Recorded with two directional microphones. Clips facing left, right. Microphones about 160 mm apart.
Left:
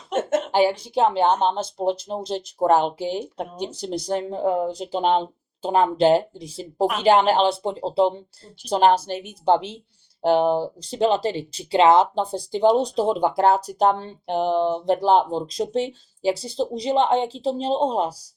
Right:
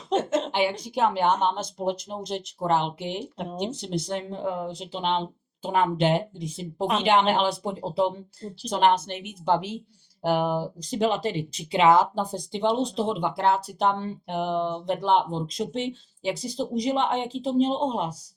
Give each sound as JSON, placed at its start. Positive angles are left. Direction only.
{"t": 0.2, "sound": "speech", "side_deg": 50}
{"t": 0.5, "sound": "speech", "side_deg": 35}